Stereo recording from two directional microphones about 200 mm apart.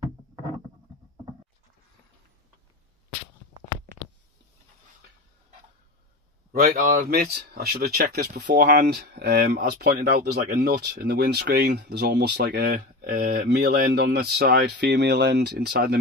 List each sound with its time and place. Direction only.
6.5 s speech: 45° right (ahead or behind)
13.5 s speech: 55° right (ahead or behind)